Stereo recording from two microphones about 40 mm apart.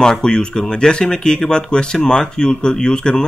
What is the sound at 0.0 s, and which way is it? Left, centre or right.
Speech, centre.